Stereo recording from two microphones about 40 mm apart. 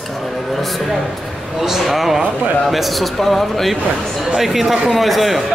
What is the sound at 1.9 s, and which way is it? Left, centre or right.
A man's voice, centre.